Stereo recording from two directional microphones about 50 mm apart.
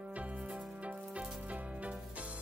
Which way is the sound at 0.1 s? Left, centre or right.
Right.